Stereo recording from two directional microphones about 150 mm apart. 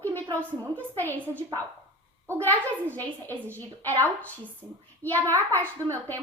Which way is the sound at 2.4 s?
10° left (ahead or behind).